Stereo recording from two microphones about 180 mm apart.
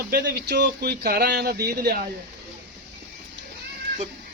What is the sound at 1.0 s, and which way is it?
Speech, 55° right (ahead or behind).